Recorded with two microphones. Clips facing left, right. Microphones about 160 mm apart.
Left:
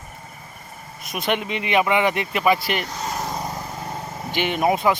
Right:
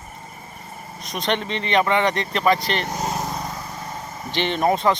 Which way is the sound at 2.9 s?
45° right (ahead or behind).